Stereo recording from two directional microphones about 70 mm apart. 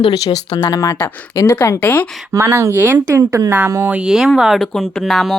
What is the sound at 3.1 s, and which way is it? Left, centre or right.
Speech, right.